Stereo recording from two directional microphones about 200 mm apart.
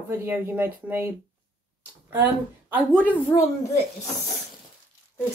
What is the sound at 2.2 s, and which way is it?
Speech, 10° right (ahead or behind).